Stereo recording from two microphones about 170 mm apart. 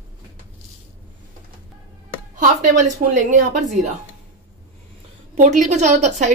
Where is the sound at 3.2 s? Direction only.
45° right (ahead or behind).